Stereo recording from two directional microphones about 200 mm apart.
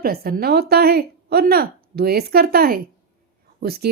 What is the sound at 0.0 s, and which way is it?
Speech, 50° right (ahead or behind).